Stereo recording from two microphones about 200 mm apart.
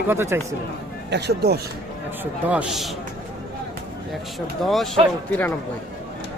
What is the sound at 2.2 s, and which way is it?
Speech, 5° right (ahead or behind).